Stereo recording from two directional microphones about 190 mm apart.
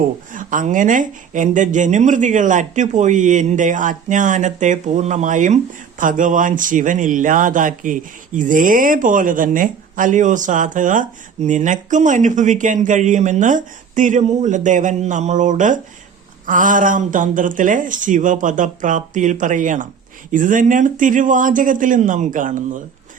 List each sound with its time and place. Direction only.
0.3 s a woman's voice: 45° right (ahead or behind)